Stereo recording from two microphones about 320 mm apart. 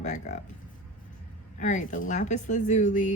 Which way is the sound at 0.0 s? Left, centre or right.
Left.